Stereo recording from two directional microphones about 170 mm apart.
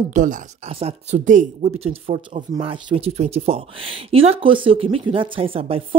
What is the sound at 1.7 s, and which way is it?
Speech, 35° right (ahead or behind).